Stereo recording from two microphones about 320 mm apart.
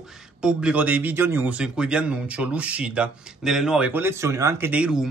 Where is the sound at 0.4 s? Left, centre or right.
Centre.